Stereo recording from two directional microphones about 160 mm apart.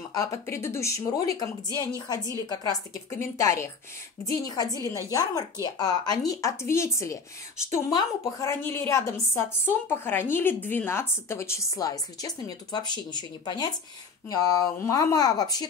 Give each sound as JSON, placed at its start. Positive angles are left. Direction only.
{"t": 0.1, "sound": "a woman's voice", "side_deg": 20}